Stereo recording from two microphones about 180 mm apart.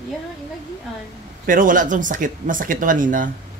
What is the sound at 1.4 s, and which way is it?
Speech, 50° right (ahead or behind).